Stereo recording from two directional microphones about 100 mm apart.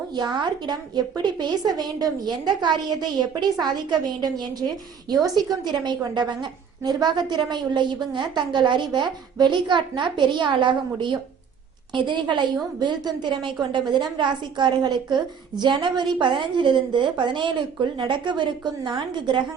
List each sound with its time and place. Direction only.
0.1 s a woman's voice: 45° right (ahead or behind)